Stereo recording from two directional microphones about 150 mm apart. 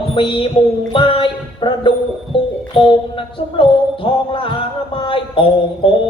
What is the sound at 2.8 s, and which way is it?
Speech, 35° left (ahead or behind).